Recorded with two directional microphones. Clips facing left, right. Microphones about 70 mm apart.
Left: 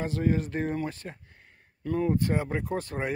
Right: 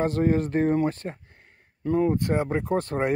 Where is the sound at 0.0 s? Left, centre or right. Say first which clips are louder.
Right 5 dB; right.